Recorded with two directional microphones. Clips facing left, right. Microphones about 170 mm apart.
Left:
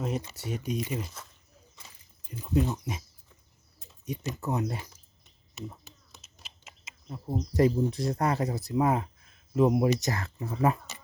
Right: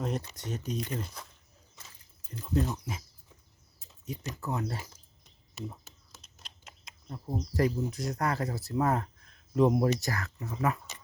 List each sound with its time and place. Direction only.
0.0 s speech: 5° left (ahead or behind)
2.3 s speech: 10° left (ahead or behind)
4.0 s speech: 20° left (ahead or behind)
5.5 s a sound: centre (ahead or behind)
7.5 s speech: 25° left (ahead or behind); by 10.0 s 5° left (ahead or behind)
10.0 s speech: 25° left (ahead or behind)